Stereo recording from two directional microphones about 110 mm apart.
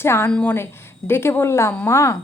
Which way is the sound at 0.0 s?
20° left (ahead or behind).